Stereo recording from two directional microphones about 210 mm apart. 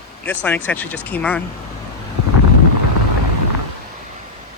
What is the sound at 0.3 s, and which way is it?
Speech, 5° left (ahead or behind).